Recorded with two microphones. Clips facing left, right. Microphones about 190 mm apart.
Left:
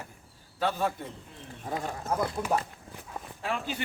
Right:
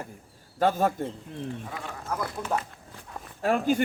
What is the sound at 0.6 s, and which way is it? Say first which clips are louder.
Speech: right 5 dB; 45° right (ahead or behind).